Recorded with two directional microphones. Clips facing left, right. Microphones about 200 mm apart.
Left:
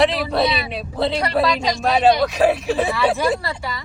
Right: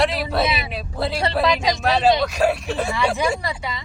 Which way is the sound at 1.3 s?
Centre (ahead or behind).